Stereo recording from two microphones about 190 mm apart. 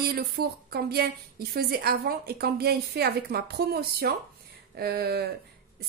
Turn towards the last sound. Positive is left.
turn(degrees=-55)  # may be behind; listen again after turning